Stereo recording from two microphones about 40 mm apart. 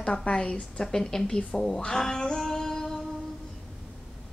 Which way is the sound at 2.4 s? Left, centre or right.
Centre.